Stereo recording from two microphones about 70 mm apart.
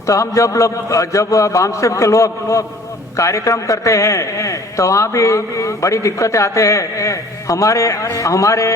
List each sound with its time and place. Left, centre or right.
0.0 s a man's voice: left